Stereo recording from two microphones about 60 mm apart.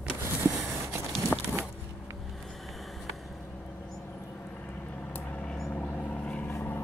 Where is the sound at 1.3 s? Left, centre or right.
Left.